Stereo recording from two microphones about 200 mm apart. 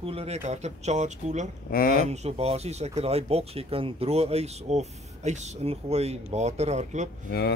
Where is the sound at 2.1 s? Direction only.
30° right (ahead or behind).